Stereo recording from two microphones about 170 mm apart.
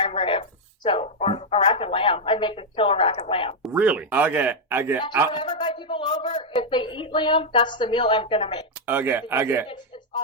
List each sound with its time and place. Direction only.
0.0 s speech: 35° left (ahead or behind)
3.7 s speech: 10° right (ahead or behind)
5.5 s a woman's voice: 30° left (ahead or behind)
8.9 s speech: 10° right (ahead or behind)